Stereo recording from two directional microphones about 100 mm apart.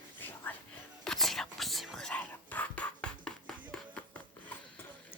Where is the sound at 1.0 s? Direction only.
Centre (ahead or behind).